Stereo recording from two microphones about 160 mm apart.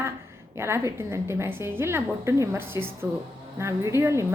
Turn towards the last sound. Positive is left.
turn(degrees=-15)  # may be behind; listen again after turning